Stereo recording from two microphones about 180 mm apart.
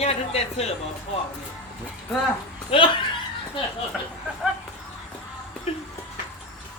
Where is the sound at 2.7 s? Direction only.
30° left (ahead or behind).